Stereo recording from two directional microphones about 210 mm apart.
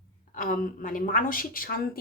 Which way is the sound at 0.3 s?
40° left (ahead or behind).